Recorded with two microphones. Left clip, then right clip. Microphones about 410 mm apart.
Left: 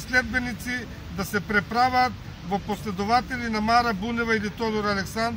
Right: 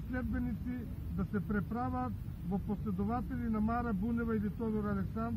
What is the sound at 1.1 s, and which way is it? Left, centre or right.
Speech, left.